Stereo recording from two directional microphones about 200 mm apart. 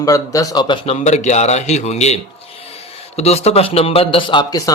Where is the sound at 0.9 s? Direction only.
35° left (ahead or behind).